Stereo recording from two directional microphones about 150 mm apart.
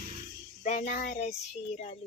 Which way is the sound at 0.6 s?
50° left (ahead or behind).